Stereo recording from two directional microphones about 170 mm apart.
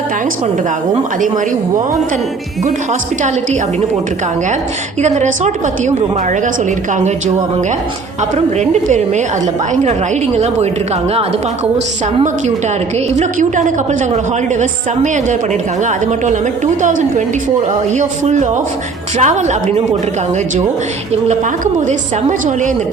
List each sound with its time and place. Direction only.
5.0 s a woman's voice: 45° right (ahead or behind)
8.5 s a woman's voice: 45° right (ahead or behind)
10.3 s a woman's voice: 40° right (ahead or behind)
13.1 s a woman's voice: 45° right (ahead or behind)
16.8 s a woman's voice: 45° right (ahead or behind)
21.2 s a woman's voice: 45° right (ahead or behind)